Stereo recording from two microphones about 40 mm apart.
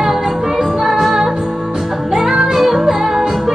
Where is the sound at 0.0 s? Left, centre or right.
Centre.